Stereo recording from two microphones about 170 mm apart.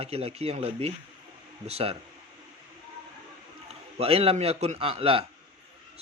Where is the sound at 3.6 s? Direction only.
35° right (ahead or behind).